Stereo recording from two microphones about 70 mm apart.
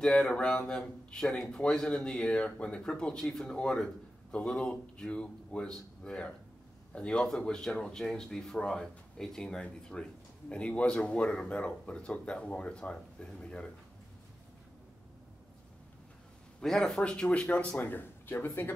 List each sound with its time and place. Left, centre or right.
0.0 s speech: centre
16.6 s speech: centre
17.7 s speech: left